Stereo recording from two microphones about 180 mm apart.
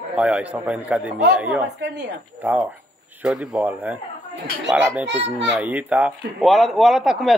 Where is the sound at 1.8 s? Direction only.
70° right (ahead or behind).